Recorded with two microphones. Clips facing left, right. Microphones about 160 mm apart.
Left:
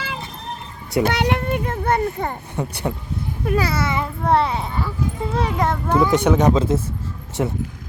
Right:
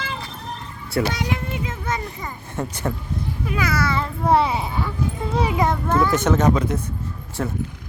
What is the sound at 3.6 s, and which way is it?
Speech, 30° left (ahead or behind).